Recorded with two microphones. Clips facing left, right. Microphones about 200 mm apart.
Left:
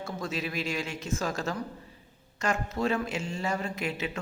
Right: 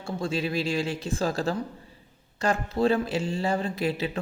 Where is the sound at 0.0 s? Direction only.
30° right (ahead or behind).